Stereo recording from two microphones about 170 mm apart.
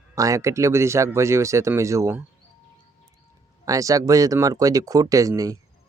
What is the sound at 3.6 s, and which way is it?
Speech, 20° right (ahead or behind).